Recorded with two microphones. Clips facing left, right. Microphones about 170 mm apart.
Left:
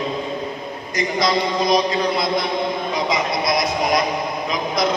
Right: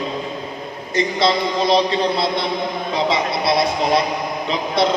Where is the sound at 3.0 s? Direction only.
30° right (ahead or behind).